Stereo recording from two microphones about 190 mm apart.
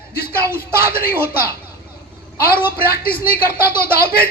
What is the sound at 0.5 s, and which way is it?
Speech, 50° left (ahead or behind).